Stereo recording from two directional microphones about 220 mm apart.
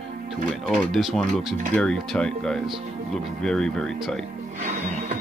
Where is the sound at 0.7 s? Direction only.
Centre (ahead or behind).